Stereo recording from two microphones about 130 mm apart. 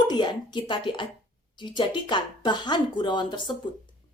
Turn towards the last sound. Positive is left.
turn(degrees=35)  # may be behind; listen again after turning